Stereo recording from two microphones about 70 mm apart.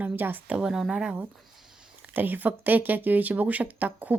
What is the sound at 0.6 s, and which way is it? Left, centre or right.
Speech, centre.